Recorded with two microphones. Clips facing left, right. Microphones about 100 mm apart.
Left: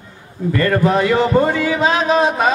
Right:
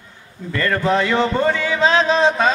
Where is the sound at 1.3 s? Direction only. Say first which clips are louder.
Left 3 dB; 35° left (ahead or behind).